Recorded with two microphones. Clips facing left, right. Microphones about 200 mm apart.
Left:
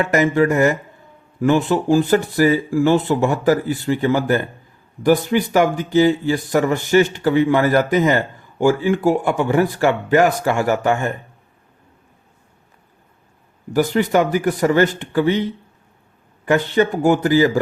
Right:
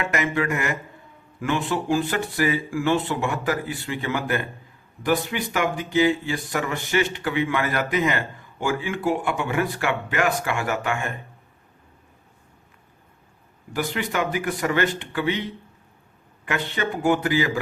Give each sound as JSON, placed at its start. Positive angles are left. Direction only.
{"t": 0.1, "sound": "speech", "side_deg": 40}
{"t": 13.7, "sound": "speech", "side_deg": 40}
{"t": 16.5, "sound": "speech", "side_deg": 40}